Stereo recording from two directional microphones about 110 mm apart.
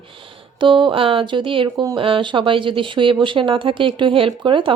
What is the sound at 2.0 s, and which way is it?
Speech, 55° right (ahead or behind).